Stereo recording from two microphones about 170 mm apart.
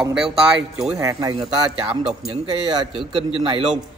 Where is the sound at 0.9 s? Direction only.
20° right (ahead or behind).